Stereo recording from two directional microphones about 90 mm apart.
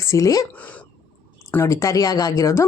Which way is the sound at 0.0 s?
35° left (ahead or behind).